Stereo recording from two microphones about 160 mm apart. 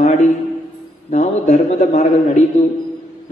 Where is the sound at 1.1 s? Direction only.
45° left (ahead or behind).